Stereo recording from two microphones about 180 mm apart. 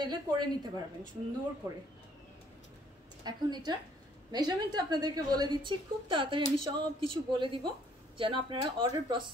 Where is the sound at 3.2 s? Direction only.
25° right (ahead or behind).